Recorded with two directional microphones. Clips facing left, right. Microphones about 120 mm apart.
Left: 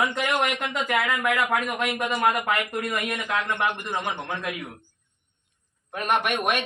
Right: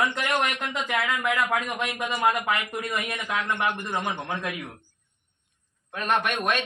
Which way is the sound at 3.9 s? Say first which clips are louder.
Even; 10° left (ahead or behind).